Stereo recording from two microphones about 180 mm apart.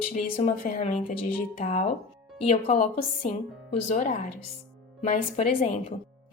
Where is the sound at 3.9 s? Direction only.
45° left (ahead or behind).